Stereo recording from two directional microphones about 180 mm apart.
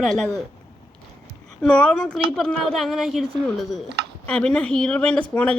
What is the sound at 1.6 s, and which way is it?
A woman's voice, 5° left (ahead or behind).